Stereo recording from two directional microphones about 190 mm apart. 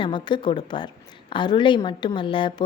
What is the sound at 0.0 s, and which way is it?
A woman's voice, 25° left (ahead or behind).